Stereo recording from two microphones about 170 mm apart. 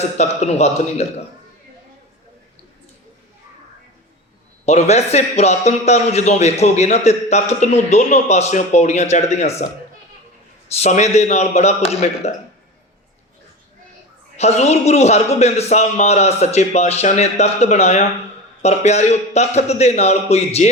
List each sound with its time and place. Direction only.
0.0 s a man's voice: 40° left (ahead or behind)
4.6 s a man's voice: 40° left (ahead or behind)
10.8 s a man's voice: 40° left (ahead or behind)
14.3 s a man's voice: 40° left (ahead or behind)